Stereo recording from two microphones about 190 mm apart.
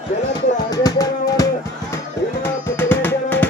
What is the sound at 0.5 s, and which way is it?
Music, 20° left (ahead or behind).